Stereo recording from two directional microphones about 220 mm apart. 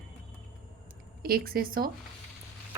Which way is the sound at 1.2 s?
45° right (ahead or behind).